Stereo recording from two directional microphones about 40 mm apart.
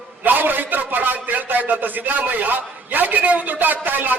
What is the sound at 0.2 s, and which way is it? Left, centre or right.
A man's voice, right.